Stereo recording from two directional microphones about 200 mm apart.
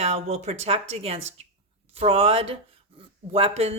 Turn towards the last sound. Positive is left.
turn(degrees=-30)  # may be behind; listen again after turning